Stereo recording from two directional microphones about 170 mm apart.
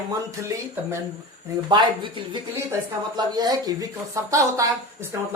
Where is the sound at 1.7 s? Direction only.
30° right (ahead or behind).